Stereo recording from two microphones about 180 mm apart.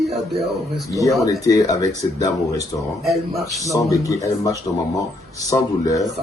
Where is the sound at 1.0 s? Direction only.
20° left (ahead or behind).